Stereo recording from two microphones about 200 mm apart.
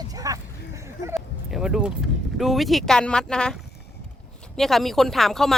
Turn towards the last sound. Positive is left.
turn(degrees=0)  # may be behind; listen again after turning